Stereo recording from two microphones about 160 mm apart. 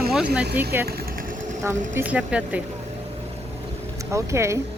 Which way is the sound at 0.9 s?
70° right (ahead or behind).